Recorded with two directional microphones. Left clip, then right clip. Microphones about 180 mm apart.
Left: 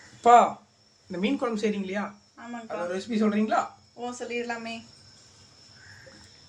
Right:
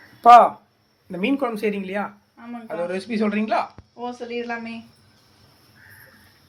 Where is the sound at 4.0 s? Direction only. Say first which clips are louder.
Right 3 dB; centre (ahead or behind).